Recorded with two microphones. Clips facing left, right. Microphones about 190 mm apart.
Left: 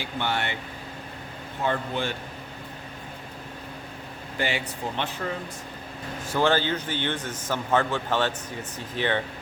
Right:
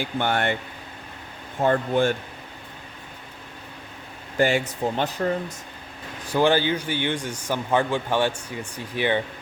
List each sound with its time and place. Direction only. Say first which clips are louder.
0.0 s speech: right 5 dB; 50° right (ahead or behind)
1.6 s speech: right 7 dB; 50° right (ahead or behind)
4.4 s speech: right 8 dB; 45° right (ahead or behind)
6.2 s a man's voice: right 3 dB; 15° right (ahead or behind)